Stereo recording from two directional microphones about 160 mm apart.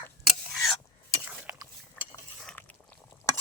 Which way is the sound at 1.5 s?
10° right (ahead or behind).